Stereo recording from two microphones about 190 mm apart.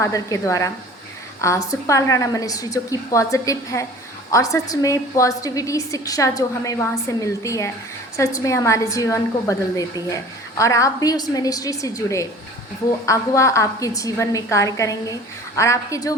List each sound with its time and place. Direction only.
0.0 s a woman's voice: 15° left (ahead or behind)